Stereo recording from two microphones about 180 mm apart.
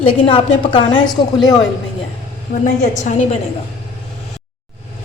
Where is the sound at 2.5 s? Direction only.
45° left (ahead or behind).